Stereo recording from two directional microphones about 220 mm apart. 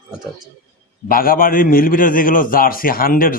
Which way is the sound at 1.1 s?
40° left (ahead or behind).